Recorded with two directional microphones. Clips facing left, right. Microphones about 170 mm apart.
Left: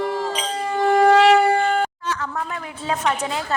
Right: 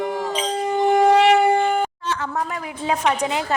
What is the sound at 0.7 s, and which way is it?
Shofar, 20° right (ahead or behind).